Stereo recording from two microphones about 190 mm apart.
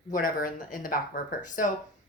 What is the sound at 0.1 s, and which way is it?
Speech, 45° left (ahead or behind).